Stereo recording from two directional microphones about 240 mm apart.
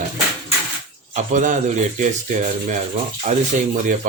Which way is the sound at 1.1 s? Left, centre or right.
Right.